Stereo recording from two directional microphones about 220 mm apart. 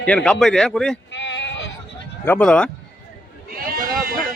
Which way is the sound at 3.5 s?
40° right (ahead or behind).